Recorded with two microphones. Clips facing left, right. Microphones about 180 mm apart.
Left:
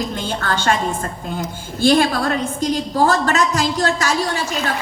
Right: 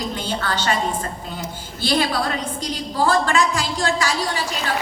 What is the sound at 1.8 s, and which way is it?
A woman's voice, 45° left (ahead or behind).